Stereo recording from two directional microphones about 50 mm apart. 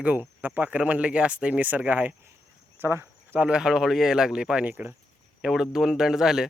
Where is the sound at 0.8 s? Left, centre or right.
Right.